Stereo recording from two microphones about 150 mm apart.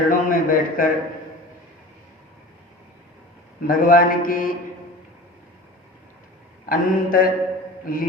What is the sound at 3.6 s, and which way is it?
Speech, 70° left (ahead or behind).